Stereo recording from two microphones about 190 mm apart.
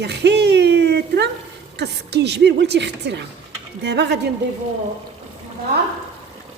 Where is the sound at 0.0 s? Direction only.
60° right (ahead or behind).